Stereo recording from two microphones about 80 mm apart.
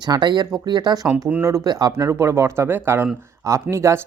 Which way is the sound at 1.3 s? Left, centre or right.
Right.